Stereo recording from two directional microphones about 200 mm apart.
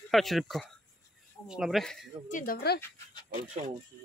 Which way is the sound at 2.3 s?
45° left (ahead or behind).